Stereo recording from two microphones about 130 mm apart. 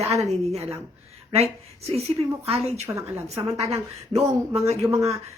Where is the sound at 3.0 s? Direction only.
25° right (ahead or behind).